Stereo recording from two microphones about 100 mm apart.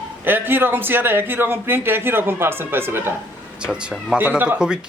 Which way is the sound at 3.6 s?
10° right (ahead or behind).